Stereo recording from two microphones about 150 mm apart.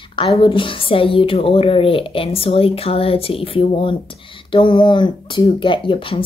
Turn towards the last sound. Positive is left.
turn(degrees=35)  # may be behind; listen again after turning